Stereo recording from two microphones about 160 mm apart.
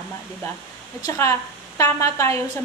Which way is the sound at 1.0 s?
20° left (ahead or behind).